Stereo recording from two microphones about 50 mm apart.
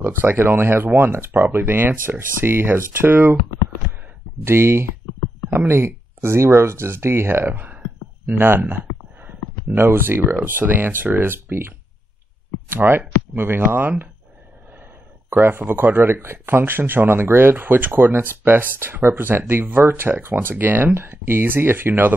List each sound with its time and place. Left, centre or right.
0.0 s speech: right
4.5 s speech: right
7.5 s a sound: right
8.5 s speech: right
12.7 s speech: right
15.2 s speech: right
20.9 s speech: right